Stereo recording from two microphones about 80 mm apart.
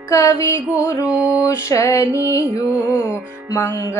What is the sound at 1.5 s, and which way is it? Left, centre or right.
Music, left.